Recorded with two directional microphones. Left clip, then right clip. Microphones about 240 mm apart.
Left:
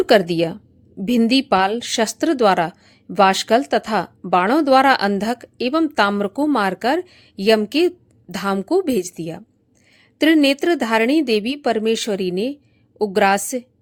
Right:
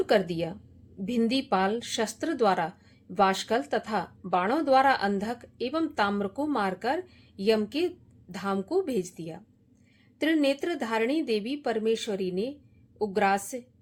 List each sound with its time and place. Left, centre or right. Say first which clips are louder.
0.0 s a woman's voice: left 10 dB; left